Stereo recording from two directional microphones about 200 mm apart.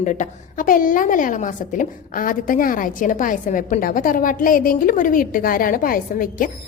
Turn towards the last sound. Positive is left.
turn(degrees=45)  # may be behind; listen again after turning